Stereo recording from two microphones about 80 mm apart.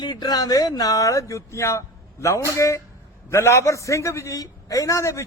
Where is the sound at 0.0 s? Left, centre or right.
Left.